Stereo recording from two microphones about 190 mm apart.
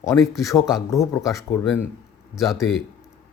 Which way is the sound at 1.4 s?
5° left (ahead or behind).